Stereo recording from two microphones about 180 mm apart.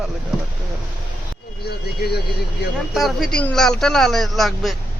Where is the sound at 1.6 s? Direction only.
60° left (ahead or behind).